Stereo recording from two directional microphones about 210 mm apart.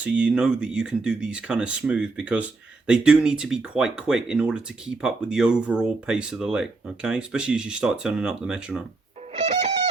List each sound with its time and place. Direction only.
0.0 s speech: 5° right (ahead or behind)
9.3 s music: 35° right (ahead or behind)